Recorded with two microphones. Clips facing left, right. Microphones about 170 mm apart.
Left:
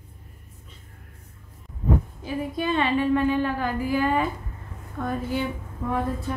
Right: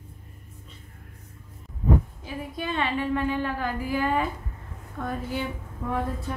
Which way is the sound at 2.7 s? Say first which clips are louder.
Left 4 dB; 30° left (ahead or behind).